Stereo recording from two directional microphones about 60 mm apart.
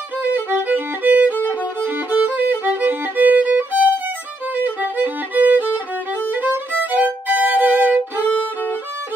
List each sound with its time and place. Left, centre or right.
0.2 s violin: right